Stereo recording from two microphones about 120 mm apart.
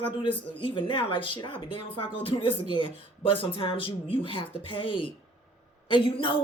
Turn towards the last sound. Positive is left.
turn(degrees=45)  # may be behind; listen again after turning